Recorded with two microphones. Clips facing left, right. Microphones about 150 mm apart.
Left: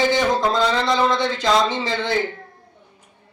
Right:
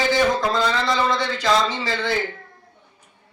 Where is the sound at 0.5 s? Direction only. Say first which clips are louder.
Left 2 dB; 20° left (ahead or behind).